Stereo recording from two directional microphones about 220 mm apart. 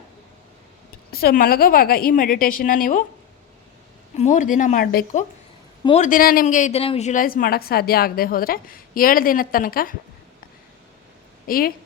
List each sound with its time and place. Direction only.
1.1 s speech: 45° left (ahead or behind)
4.2 s speech: 35° left (ahead or behind)
5.8 s speech: 30° left (ahead or behind)
11.4 s a woman's voice: 40° left (ahead or behind)